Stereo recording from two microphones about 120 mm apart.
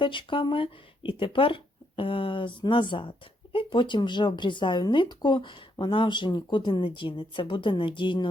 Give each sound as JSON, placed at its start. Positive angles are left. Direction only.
{"t": 0.0, "sound": "speech", "side_deg": 45}